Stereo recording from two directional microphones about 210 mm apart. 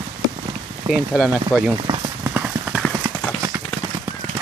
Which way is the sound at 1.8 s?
20° right (ahead or behind).